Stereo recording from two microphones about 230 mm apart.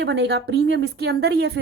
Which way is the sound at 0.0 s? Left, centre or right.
Right.